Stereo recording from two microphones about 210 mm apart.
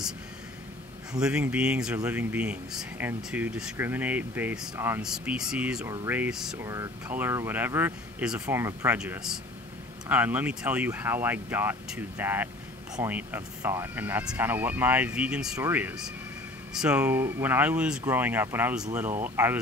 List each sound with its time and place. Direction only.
1.2 s speech: 5° right (ahead or behind)